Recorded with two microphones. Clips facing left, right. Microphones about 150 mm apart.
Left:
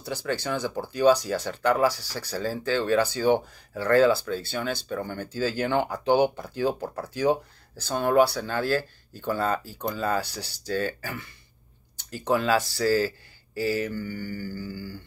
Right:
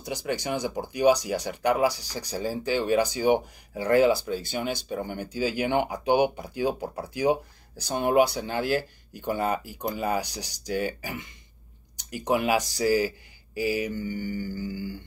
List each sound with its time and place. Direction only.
0.0 s speech: 15° right (ahead or behind)